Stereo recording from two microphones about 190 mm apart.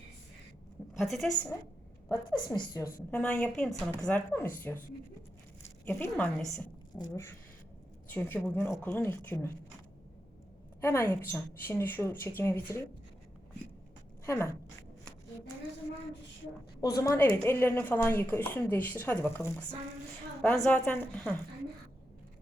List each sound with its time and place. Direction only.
0.9 s a woman's voice: centre (ahead or behind)
2.0 s speech: 15° left (ahead or behind)
3.1 s a woman's voice: 5° left (ahead or behind)
5.8 s speech: 10° left (ahead or behind)
10.8 s speech: 15° left (ahead or behind)
14.3 s speech: 15° left (ahead or behind)
16.8 s speech: 20° left (ahead or behind)